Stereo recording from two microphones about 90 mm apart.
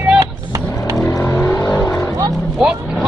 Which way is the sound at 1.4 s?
30° left (ahead or behind).